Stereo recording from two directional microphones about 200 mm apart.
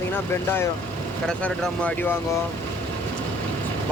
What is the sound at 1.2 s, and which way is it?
Speech, 5° left (ahead or behind).